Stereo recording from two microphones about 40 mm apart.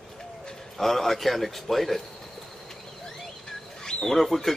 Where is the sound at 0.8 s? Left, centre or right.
Centre.